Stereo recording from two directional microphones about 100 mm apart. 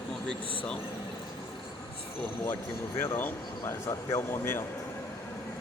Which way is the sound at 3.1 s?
20° left (ahead or behind).